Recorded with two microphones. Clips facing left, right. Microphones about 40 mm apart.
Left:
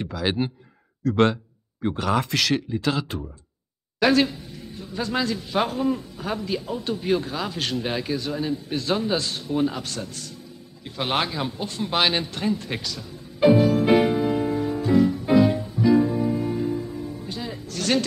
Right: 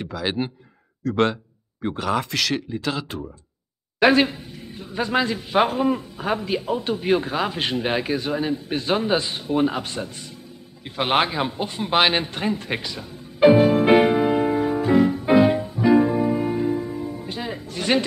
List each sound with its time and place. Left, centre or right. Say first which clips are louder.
0.0 s speech: even; centre
4.0 s a man's voice: right 3 dB; right
10.8 s a sound: right 4 dB; right